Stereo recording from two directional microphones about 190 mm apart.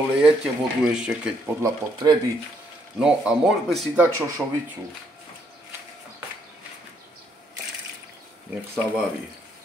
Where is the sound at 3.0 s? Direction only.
5° right (ahead or behind).